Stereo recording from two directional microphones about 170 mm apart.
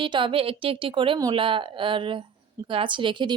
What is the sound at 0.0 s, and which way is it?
A woman's voice, 30° right (ahead or behind).